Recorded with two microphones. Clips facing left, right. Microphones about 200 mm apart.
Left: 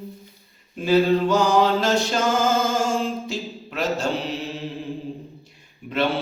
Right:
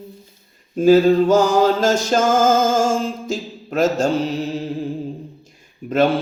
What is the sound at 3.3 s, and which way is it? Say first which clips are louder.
Speech: right 6 dB; 45° right (ahead or behind).